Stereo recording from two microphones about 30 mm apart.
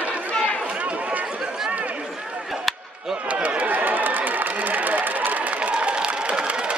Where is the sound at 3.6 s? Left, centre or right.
Right.